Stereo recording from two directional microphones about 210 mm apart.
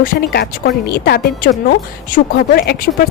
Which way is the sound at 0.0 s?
45° left (ahead or behind).